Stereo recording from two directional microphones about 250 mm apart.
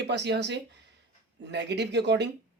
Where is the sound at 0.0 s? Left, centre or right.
Right.